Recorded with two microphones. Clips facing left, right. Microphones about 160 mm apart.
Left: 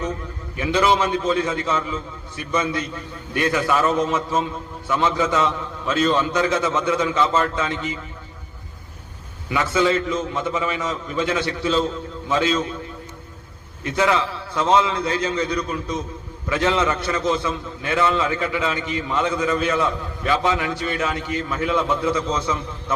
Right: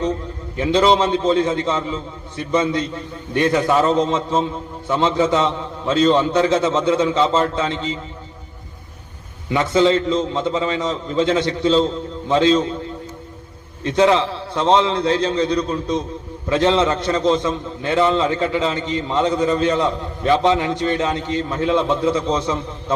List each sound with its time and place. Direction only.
0.5 s a man's voice: 30° right (ahead or behind)
9.5 s a man's voice: 25° right (ahead or behind)
13.9 s a man's voice: 30° right (ahead or behind)